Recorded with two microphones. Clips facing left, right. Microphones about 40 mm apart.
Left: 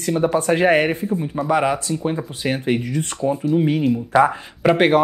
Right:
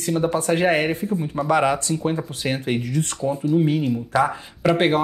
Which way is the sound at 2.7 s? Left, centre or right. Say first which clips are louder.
Left 2 dB; left.